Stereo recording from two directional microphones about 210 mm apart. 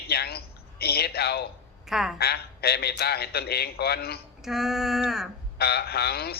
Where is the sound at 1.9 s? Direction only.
Centre (ahead or behind).